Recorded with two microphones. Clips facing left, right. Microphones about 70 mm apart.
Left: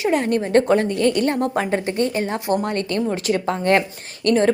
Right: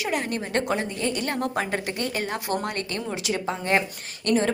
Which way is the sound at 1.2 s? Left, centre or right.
Left.